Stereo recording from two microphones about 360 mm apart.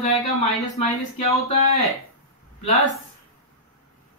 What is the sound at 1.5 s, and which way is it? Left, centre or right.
Speech, centre.